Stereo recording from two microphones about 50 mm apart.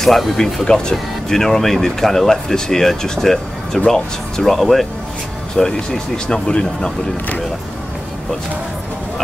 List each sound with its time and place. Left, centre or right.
0.0 s speech: centre
0.7 s speech: centre
5.6 s speech: centre